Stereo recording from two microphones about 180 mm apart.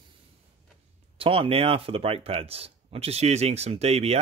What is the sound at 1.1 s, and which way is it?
Speech, 30° right (ahead or behind).